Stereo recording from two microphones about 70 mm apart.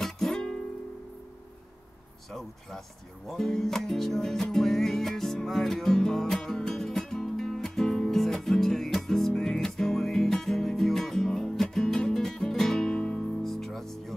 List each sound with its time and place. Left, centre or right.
0.0 s music: centre
3.3 s music: centre